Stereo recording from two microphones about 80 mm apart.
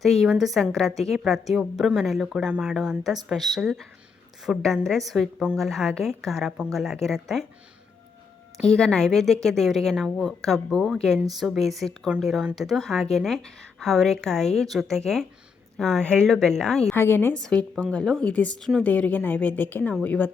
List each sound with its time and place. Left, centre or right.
0.0 s a woman's voice: centre
8.6 s a woman's voice: centre
16.9 s speech: left
17.3 s a woman's voice: centre